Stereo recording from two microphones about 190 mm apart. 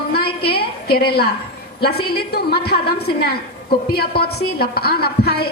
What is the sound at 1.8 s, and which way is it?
A woman's voice, 55° left (ahead or behind).